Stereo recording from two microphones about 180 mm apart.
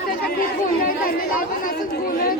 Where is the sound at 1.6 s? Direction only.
50° left (ahead or behind).